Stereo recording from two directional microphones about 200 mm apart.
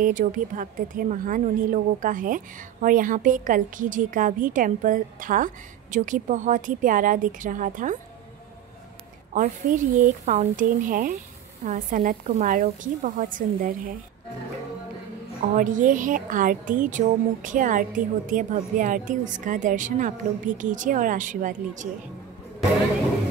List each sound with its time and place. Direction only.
0.0 s a woman's voice: 40° right (ahead or behind)
9.3 s a woman's voice: 40° right (ahead or behind)
15.5 s a woman's voice: 40° right (ahead or behind)